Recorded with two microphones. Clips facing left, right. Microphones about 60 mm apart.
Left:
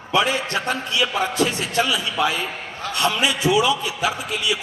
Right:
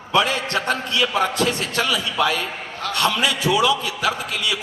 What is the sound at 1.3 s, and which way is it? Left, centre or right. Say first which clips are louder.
A man's voice: left 1 dB; left.